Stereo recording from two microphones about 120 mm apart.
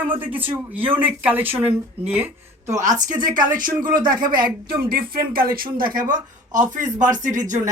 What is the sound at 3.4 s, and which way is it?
Speech, 35° right (ahead or behind).